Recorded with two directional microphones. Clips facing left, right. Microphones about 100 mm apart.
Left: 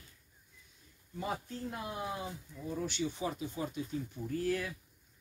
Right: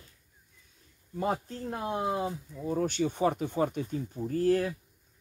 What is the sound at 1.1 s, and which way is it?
Speech, 45° right (ahead or behind).